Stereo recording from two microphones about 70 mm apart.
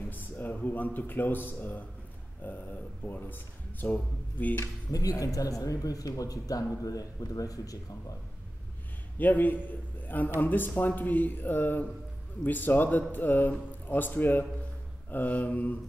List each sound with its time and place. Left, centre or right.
0.1 s a man's voice: left
4.9 s speech: left
9.2 s a man's voice: left